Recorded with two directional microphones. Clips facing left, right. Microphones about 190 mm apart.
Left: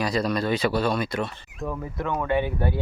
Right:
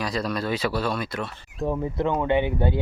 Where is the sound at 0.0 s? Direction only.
Centre (ahead or behind).